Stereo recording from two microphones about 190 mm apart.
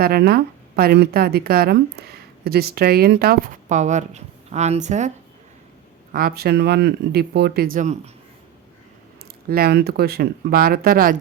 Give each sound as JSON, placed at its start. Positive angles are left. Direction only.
{"t": 0.0, "sound": "a woman's voice", "side_deg": -55}
{"t": 6.1, "sound": "speech", "side_deg": -50}
{"t": 9.5, "sound": "a woman's voice", "side_deg": -55}